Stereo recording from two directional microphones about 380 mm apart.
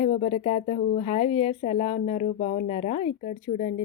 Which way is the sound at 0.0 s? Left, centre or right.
Centre.